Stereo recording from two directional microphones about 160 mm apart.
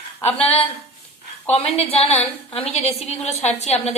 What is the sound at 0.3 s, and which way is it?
A woman's voice, 40° left (ahead or behind).